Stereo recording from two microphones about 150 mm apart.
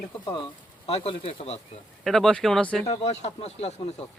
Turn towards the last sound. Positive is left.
turn(degrees=45)  # may be behind; listen again after turning